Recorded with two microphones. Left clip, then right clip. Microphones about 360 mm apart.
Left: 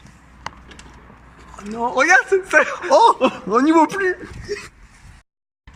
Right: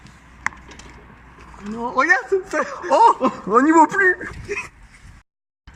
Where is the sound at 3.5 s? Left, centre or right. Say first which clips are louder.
Right 3 dB; centre.